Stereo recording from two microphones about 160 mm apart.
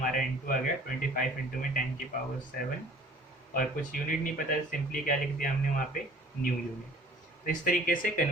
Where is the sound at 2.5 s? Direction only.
60° left (ahead or behind).